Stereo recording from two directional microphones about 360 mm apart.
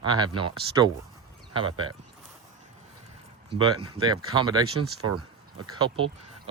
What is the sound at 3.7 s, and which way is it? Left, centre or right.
Speech, right.